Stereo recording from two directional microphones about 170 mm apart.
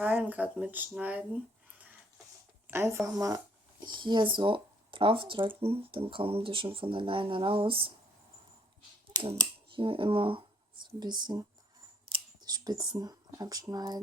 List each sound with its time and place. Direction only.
0.0 s speech: 10° right (ahead or behind)
2.6 s a woman's voice: 15° right (ahead or behind); by 7.9 s 30° right (ahead or behind)
9.1 s a sound: 25° right (ahead or behind)
11.2 s speech: 25° right (ahead or behind)